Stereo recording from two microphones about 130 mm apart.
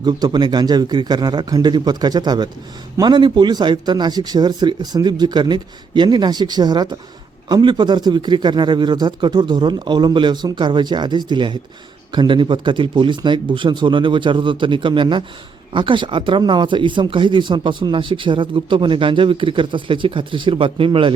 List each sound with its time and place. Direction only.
0.0 s speech: 35° right (ahead or behind)